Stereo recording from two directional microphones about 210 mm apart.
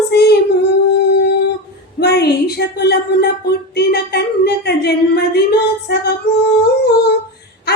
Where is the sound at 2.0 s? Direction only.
50° left (ahead or behind).